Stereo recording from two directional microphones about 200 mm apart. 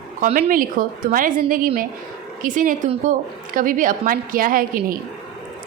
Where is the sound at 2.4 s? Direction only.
40° right (ahead or behind).